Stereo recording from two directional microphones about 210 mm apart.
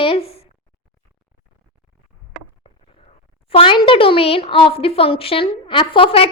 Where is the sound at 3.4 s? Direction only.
25° left (ahead or behind).